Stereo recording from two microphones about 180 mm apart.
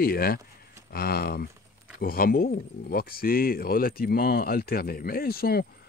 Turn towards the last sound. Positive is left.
turn(degrees=60)  # may be behind; listen again after turning